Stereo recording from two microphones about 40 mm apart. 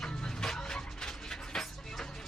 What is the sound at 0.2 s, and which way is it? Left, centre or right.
Music, centre.